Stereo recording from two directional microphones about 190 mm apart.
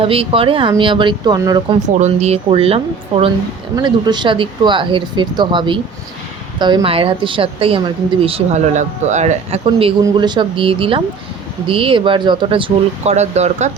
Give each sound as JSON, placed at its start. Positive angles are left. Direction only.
{"t": 0.0, "sound": "speech", "side_deg": -30}
{"t": 2.0, "sound": "speech", "side_deg": -35}